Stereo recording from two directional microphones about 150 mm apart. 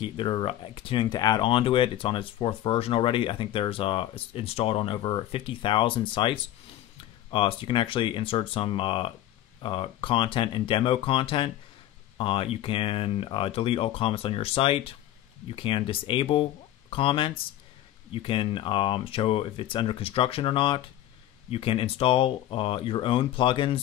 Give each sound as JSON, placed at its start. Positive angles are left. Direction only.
{"t": 0.0, "sound": "speech", "side_deg": 35}